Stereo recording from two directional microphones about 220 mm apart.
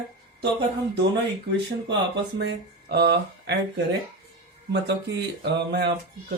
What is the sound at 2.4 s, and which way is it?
Speech, 50° right (ahead or behind).